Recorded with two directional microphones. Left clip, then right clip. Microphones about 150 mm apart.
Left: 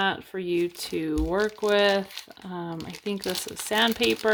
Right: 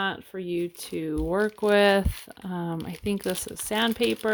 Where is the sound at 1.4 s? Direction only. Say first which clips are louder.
Right 2 dB; 45° right (ahead or behind).